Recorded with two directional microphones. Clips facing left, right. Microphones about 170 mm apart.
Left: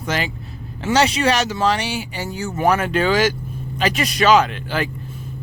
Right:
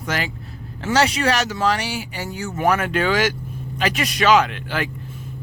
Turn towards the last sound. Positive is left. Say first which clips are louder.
# left 2 dB
turn(degrees=35)  # may be behind; listen again after turning